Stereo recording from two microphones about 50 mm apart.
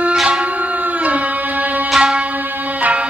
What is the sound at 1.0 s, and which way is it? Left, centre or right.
Music, right.